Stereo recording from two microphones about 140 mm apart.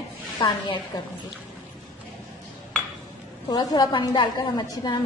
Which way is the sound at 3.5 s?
30° left (ahead or behind).